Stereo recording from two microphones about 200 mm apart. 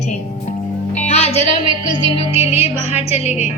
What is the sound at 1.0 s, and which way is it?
Music, 30° left (ahead or behind).